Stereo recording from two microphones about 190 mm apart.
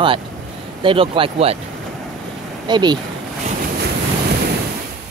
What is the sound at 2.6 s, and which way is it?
Speech, 20° right (ahead or behind).